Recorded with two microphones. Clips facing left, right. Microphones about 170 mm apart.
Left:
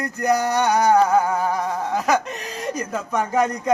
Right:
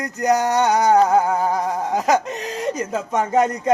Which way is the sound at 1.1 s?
20° right (ahead or behind).